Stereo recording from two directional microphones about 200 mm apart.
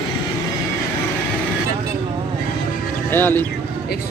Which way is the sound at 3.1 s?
10° left (ahead or behind).